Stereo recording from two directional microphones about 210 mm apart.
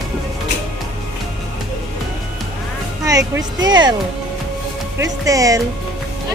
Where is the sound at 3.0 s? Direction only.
15° right (ahead or behind).